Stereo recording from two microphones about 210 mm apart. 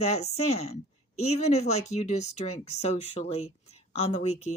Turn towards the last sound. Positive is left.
turn(degrees=35)  # may be behind; listen again after turning